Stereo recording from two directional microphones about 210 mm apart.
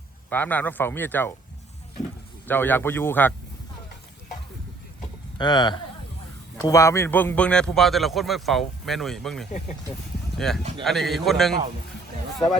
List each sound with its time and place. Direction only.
0.3 s speech: 10° left (ahead or behind)
2.5 s speech: 10° left (ahead or behind)
5.4 s a man's voice: 20° left (ahead or behind); by 10.6 s centre (ahead or behind)
10.6 s speech: 30° right (ahead or behind)
10.8 s a man's voice: centre (ahead or behind)